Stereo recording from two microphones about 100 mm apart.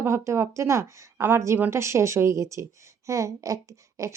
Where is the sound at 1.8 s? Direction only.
30° right (ahead or behind).